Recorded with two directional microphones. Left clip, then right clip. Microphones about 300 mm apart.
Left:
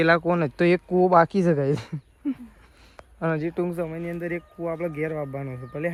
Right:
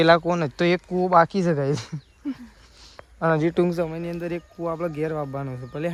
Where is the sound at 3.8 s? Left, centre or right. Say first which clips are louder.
Right 2 dB; centre.